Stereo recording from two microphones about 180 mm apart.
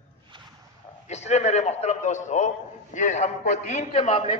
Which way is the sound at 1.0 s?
40° left (ahead or behind).